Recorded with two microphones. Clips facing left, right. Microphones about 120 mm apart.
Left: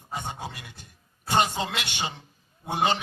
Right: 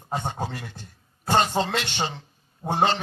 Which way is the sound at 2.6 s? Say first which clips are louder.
Right 5 dB; 90° right.